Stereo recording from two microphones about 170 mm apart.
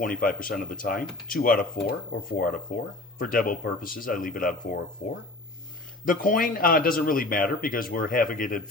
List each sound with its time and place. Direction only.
0.0 s speech: 55° left (ahead or behind)
6.1 s speech: 55° left (ahead or behind)